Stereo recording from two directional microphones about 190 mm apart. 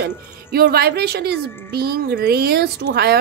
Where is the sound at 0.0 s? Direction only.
55° right (ahead or behind).